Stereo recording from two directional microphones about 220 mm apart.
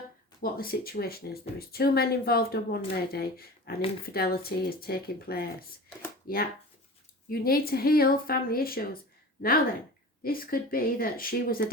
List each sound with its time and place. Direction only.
0.4 s speech: 40° left (ahead or behind)
10.2 s speech: 40° left (ahead or behind)